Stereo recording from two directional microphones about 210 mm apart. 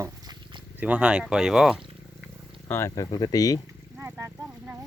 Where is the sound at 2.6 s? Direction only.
10° left (ahead or behind).